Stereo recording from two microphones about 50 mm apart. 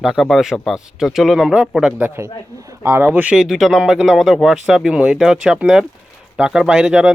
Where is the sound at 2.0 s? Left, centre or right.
Right.